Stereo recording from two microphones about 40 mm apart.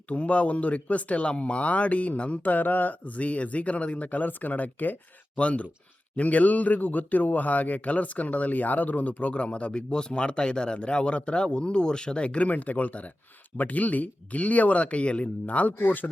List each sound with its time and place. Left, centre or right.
0.1 s speech: left
2.4 s speech: left
3.2 s speech: left
5.4 s speech: left